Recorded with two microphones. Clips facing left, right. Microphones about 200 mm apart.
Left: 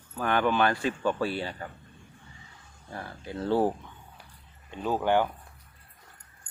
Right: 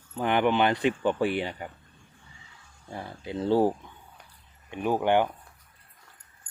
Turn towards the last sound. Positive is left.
turn(degrees=-15)  # may be behind; listen again after turning